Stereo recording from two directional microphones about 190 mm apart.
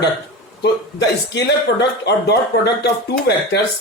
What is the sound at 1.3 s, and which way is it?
Speech, 65° left (ahead or behind).